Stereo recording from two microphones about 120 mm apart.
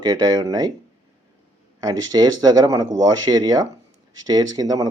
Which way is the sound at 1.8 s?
35° right (ahead or behind).